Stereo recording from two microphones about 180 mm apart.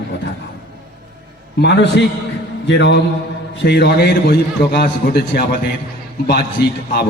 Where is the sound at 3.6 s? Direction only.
65° left (ahead or behind).